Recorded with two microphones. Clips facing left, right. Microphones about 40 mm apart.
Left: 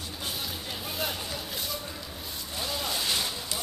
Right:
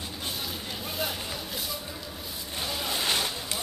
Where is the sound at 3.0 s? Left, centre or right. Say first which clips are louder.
Right 4 dB; right.